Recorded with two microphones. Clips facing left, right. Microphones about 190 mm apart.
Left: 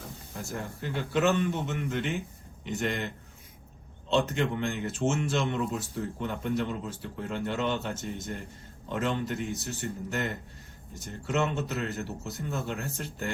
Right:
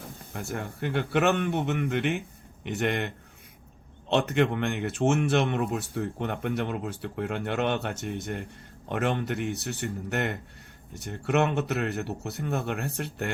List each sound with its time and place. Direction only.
0.3 s speech: 60° right (ahead or behind)
4.1 s speech: 65° right (ahead or behind)